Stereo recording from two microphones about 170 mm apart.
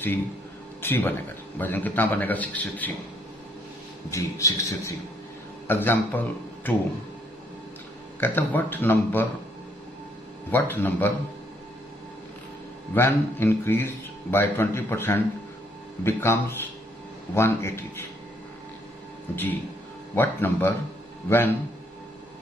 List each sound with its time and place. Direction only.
0.8 s speech: 15° left (ahead or behind)
4.1 s a man's voice: 20° left (ahead or behind)
8.2 s speech: 10° left (ahead or behind)
10.5 s speech: 10° left (ahead or behind)
12.9 s speech: 15° left (ahead or behind)
20.2 s speech: 10° left (ahead or behind)